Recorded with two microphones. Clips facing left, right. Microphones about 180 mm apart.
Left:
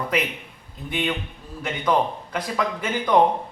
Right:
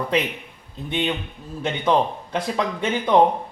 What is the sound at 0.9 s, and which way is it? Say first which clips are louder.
Speech: right 2 dB; 25° right (ahead or behind).